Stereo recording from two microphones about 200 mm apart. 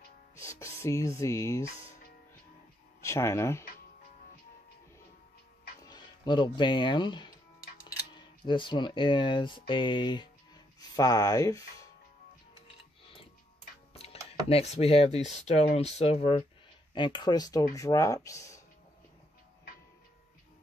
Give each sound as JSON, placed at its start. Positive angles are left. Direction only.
{"t": 0.4, "sound": "music", "side_deg": 15}
{"t": 3.0, "sound": "speech", "side_deg": 15}
{"t": 5.9, "sound": "speech", "side_deg": 20}
{"t": 13.9, "sound": "speech", "side_deg": 30}